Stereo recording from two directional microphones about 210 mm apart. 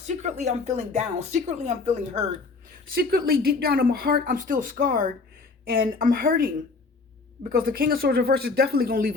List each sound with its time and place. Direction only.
0.0 s speech: 35° right (ahead or behind)
2.9 s speech: 45° right (ahead or behind)
7.5 s speech: 45° right (ahead or behind)